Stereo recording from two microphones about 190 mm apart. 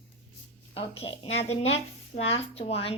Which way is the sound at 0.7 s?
30° left (ahead or behind).